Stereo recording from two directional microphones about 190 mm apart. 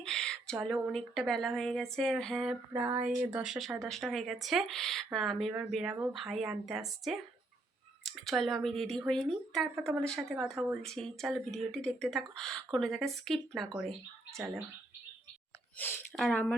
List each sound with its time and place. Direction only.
0.0 s a woman's voice: 5° left (ahead or behind)
15.8 s a woman's voice: 10° left (ahead or behind)